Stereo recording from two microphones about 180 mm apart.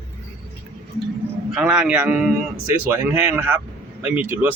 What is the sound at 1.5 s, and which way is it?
A man's voice, 5° right (ahead or behind).